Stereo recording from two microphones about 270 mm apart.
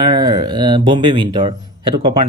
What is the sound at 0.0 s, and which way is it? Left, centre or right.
Speech, centre.